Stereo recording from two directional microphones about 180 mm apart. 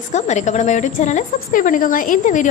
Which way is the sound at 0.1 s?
40° left (ahead or behind).